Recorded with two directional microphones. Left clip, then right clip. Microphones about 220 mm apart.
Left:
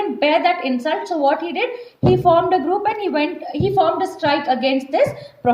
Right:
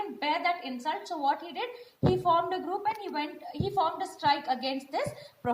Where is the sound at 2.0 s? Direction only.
40° right (ahead or behind).